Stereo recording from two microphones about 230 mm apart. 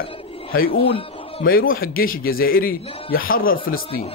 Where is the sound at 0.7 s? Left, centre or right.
Left.